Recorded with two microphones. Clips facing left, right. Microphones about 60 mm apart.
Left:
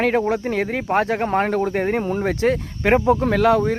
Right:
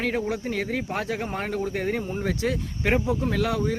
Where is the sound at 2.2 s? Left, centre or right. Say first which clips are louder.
Left 7 dB; left.